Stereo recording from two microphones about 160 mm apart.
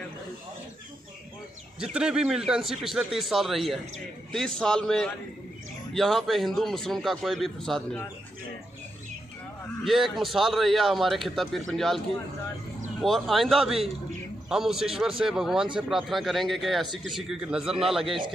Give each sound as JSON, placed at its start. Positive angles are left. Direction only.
{"t": 1.8, "sound": "a man's voice", "side_deg": -5}
{"t": 9.8, "sound": "a man's voice", "side_deg": 0}
{"t": 13.0, "sound": "a man's voice", "side_deg": 0}